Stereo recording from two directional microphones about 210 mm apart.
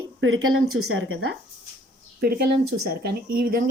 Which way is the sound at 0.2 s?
75° right (ahead or behind).